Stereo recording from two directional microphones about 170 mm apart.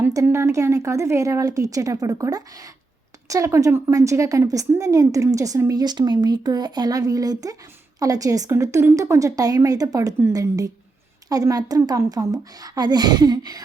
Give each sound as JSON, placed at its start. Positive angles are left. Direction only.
{"t": 0.0, "sound": "a woman's voice", "side_deg": -15}